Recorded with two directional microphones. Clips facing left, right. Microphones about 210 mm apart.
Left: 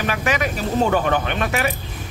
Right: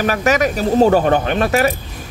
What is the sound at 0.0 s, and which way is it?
Speech, 45° right (ahead or behind).